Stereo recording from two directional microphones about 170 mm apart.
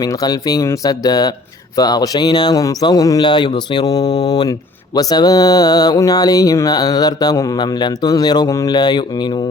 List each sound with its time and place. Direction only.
0.0 s speech: 20° left (ahead or behind)